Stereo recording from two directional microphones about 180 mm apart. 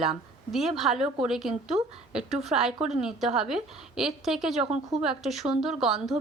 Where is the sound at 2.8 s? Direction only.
40° right (ahead or behind).